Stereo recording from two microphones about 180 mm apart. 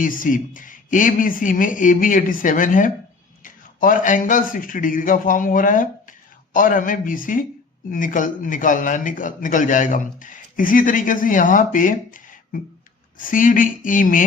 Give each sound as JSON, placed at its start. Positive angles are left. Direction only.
{"t": 0.0, "sound": "a man's voice", "side_deg": 50}